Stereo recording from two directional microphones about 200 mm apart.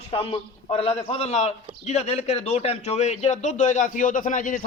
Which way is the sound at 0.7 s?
30° left (ahead or behind).